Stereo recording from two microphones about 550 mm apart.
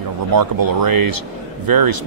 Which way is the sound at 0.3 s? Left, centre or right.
Right.